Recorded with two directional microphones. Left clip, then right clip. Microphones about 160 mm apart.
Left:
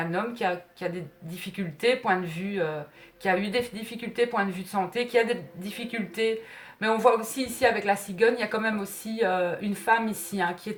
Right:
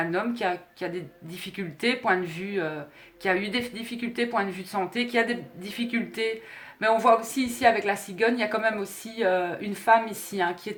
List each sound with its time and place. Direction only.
0.0 s a woman's voice: 35° right (ahead or behind)